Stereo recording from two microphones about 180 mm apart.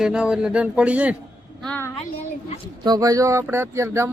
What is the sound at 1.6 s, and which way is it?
Speech, 10° left (ahead or behind).